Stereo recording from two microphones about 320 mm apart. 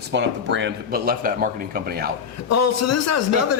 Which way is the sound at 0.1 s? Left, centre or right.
Right.